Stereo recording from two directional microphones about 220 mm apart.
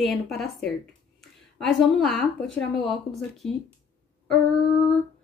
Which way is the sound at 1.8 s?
Centre (ahead or behind).